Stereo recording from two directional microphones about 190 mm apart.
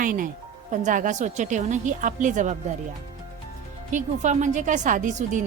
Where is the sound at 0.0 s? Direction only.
45° right (ahead or behind).